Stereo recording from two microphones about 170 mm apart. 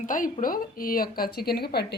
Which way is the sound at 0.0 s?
50° left (ahead or behind).